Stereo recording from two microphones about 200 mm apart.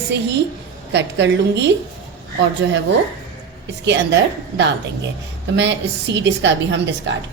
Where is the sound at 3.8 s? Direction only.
60° right (ahead or behind).